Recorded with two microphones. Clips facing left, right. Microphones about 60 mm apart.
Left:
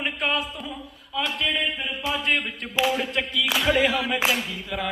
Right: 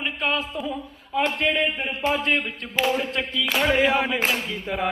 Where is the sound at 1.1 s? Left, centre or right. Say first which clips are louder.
Right 4 dB; right.